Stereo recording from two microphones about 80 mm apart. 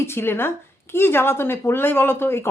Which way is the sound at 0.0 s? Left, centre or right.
Left.